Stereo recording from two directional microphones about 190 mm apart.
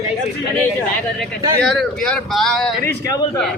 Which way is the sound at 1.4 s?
20° right (ahead or behind).